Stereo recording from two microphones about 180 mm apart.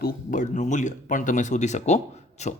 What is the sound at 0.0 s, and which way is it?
Speech, 50° left (ahead or behind).